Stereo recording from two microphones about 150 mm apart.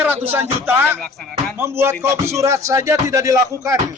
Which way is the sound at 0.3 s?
15° right (ahead or behind).